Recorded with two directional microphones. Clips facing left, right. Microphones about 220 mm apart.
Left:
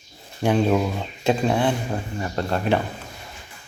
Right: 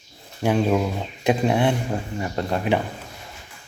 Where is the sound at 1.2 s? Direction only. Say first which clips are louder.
Right 1 dB; 15° right (ahead or behind).